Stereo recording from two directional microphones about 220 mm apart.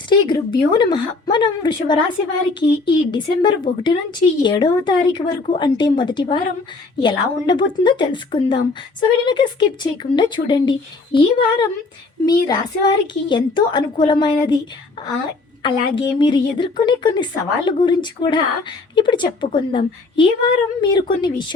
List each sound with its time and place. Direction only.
0.1 s speech: 20° left (ahead or behind)
15.6 s speech: 20° left (ahead or behind)